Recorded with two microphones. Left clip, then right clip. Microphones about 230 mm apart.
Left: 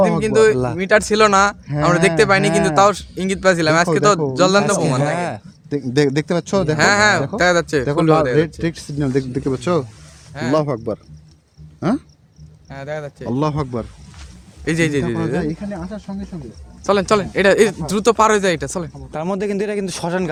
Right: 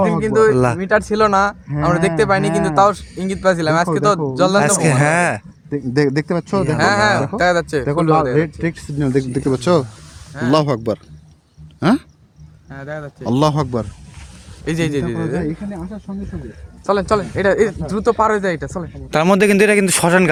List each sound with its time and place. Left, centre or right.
0.0 s speech: centre
0.5 s a man's voice: right
0.8 s speech: centre
4.6 s a man's voice: right
5.7 s speech: centre
6.7 s speech: centre
8.6 s speech: right
9.4 s speech: right
12.7 s speech: centre
13.2 s speech: right
14.6 s speech: centre
15.4 s speech: centre
16.8 s speech: centre
19.1 s a man's voice: right